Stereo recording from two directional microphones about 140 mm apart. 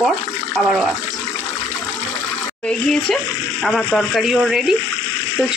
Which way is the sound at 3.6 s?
Centre (ahead or behind).